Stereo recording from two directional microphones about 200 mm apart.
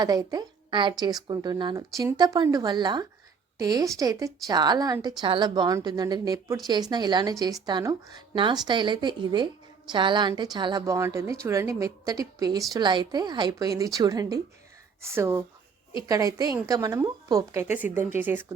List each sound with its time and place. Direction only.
0.0 s a woman's voice: 20° right (ahead or behind)